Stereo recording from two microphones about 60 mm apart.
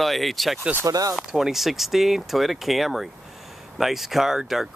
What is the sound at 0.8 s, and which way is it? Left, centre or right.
Speech, right.